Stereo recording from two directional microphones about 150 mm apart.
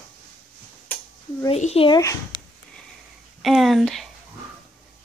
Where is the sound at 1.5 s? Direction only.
45° left (ahead or behind).